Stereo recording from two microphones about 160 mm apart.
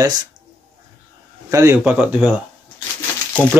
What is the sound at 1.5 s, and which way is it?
Speech, 20° right (ahead or behind).